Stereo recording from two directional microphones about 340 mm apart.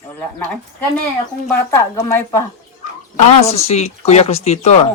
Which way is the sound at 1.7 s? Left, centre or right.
Centre.